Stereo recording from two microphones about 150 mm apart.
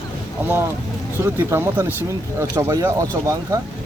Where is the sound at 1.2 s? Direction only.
15° right (ahead or behind).